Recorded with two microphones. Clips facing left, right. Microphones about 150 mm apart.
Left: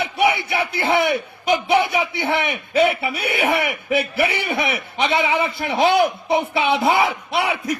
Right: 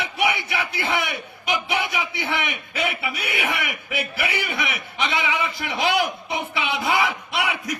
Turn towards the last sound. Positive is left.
turn(degrees=30)  # may be behind; listen again after turning